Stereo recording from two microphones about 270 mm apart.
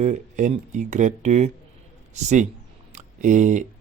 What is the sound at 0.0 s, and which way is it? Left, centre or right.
Speech, right.